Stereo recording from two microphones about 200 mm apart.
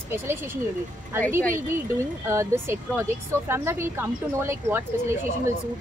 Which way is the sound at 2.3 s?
15° right (ahead or behind).